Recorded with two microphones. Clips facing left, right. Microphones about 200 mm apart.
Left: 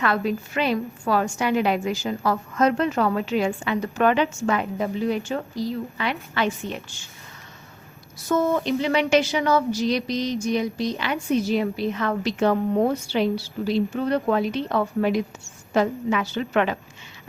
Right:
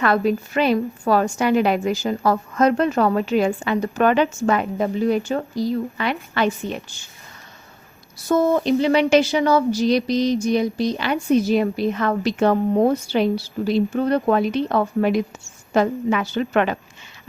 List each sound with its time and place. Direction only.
0.0 s a woman's voice: 45° right (ahead or behind)
8.3 s a woman's voice: 30° right (ahead or behind); by 12.5 s 50° right (ahead or behind)
12.7 s a woman's voice: 35° right (ahead or behind)
13.7 s a woman's voice: 50° right (ahead or behind)